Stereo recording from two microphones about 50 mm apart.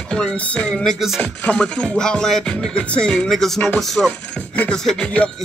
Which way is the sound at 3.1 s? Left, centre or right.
Centre.